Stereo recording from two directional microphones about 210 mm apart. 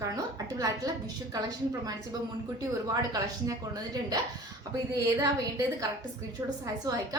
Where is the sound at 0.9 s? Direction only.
20° right (ahead or behind).